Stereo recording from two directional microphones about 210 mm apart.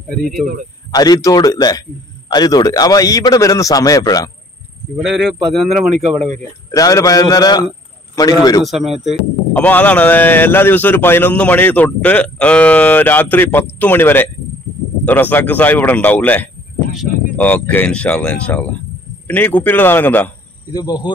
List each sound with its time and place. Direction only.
0.9 s speech: 20° left (ahead or behind)
4.9 s speech: 5° right (ahead or behind)
6.7 s speech: 15° left (ahead or behind)
8.6 s speech: centre (ahead or behind); by 21.1 s 20° left (ahead or behind)